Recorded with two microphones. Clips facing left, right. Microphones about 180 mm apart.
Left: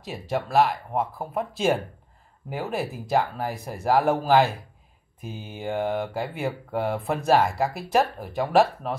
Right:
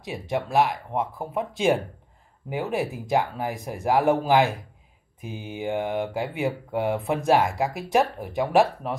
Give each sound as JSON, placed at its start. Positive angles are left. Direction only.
{"t": 0.0, "sound": "speech", "side_deg": -15}
{"t": 3.1, "sound": "speech", "side_deg": -15}